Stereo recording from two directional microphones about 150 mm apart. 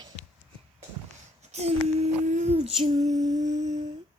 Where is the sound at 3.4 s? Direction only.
50° right (ahead or behind).